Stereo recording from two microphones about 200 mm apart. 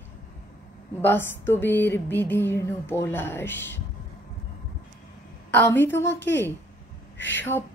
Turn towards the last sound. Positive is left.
turn(degrees=65)  # may be behind; listen again after turning